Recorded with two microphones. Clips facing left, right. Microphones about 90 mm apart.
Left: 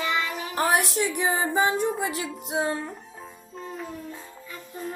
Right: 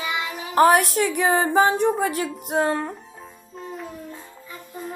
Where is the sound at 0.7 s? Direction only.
50° right (ahead or behind).